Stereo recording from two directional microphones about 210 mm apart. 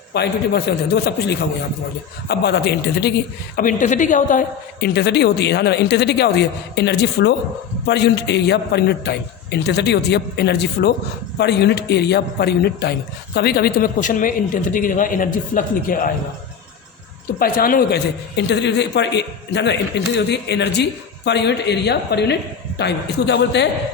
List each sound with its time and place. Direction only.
0.1 s a man's voice: 50° left (ahead or behind)
3.5 s a man's voice: 40° left (ahead or behind)
17.4 s a man's voice: 45° left (ahead or behind)